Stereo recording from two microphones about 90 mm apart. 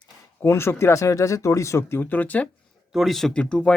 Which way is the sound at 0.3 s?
30° left (ahead or behind).